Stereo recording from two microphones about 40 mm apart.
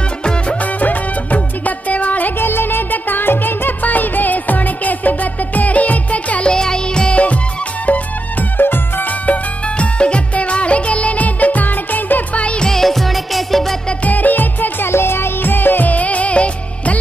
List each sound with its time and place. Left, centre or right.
0.2 s music: left
0.6 s music: left
2.3 s music: left
6.5 s music: centre
7.8 s music: left
8.5 s music: left
9.2 s music: left
12.4 s music: left
12.6 s music: centre
14.0 s music: left
14.9 s music: left
15.9 s music of bollywood: left